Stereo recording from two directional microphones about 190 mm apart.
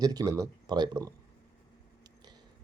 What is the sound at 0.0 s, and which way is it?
Speech, 20° right (ahead or behind).